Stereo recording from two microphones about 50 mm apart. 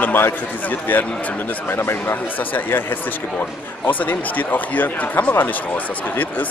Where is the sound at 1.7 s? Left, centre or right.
Left.